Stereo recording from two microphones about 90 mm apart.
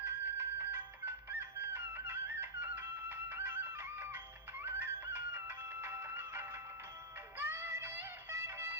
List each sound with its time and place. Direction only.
0.0 s music: 25° right (ahead or behind)